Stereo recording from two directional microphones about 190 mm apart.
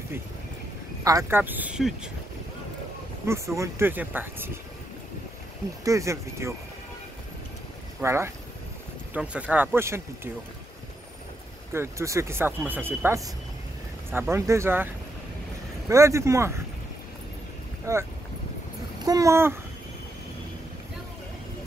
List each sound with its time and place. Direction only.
1.0 s speech: 15° right (ahead or behind)
3.3 s speech: 15° right (ahead or behind)
5.9 s speech: 15° right (ahead or behind)
8.0 s speech: 15° right (ahead or behind)
11.7 s speech: 15° right (ahead or behind)
15.9 s speech: 15° right (ahead or behind)
17.9 s speech: 15° right (ahead or behind)
19.0 s a sound: 15° right (ahead or behind)